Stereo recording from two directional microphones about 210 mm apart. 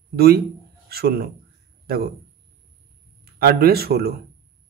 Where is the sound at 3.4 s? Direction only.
45° right (ahead or behind).